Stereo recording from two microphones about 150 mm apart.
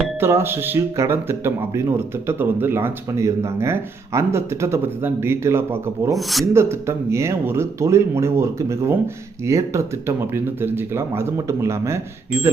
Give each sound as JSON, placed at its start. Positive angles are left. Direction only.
{"t": 0.2, "sound": "speech", "side_deg": -15}